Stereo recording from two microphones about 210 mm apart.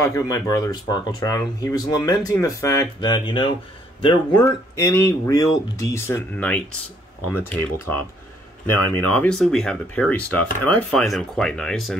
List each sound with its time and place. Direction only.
0.0 s speech: 15° left (ahead or behind)